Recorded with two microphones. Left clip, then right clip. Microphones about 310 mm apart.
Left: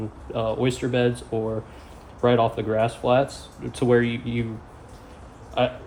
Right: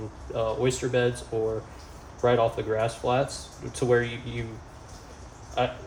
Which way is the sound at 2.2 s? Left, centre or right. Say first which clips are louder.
Left 3 dB; centre.